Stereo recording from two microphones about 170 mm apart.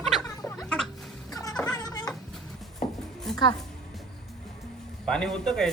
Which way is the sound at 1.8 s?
25° left (ahead or behind).